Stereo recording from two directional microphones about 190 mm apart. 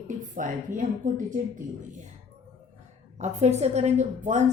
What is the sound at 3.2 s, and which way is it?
A woman's voice, 35° right (ahead or behind).